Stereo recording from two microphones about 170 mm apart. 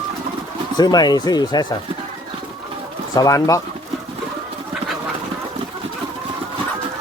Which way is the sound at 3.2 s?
20° left (ahead or behind).